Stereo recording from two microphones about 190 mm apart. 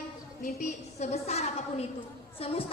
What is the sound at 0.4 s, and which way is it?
A woman's voice, 45° left (ahead or behind).